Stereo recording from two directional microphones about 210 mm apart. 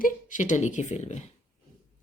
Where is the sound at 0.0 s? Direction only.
35° left (ahead or behind).